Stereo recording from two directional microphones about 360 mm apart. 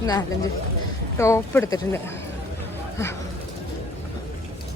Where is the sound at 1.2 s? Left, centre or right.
Centre.